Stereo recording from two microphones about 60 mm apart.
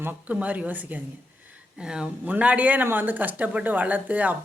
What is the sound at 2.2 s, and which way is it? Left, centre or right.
Speech, right.